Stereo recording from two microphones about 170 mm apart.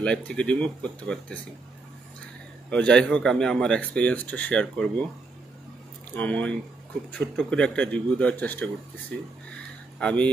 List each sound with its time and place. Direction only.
0.0 s speech: 5° left (ahead or behind)
2.7 s speech: 5° left (ahead or behind)
6.1 s speech: 10° left (ahead or behind)